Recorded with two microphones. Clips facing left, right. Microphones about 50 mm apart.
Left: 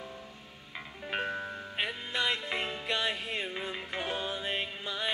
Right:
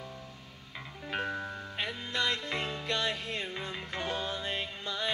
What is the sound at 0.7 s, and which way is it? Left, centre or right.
Music, centre.